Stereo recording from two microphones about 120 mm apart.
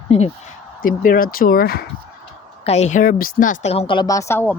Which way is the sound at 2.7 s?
65° left (ahead or behind).